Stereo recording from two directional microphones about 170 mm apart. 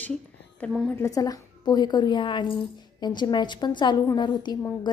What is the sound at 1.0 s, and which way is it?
A woman's voice, 20° left (ahead or behind).